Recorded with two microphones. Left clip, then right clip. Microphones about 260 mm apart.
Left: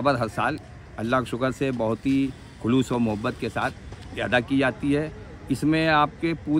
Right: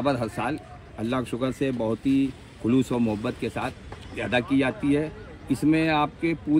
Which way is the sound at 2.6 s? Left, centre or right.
Centre.